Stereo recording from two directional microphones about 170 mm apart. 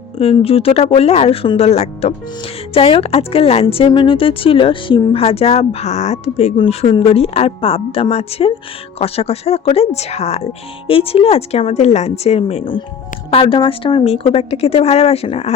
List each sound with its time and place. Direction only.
0.2 s speech: 35° left (ahead or behind)